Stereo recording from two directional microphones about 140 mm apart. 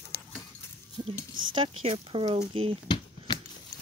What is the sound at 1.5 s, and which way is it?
Speech, 40° right (ahead or behind).